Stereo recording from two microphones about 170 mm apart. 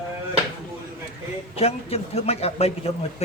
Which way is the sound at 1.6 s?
35° left (ahead or behind).